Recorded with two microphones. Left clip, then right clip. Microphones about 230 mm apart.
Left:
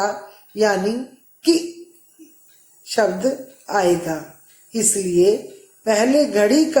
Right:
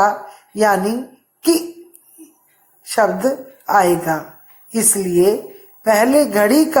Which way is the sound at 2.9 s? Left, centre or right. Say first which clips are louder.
Right 3 dB; right.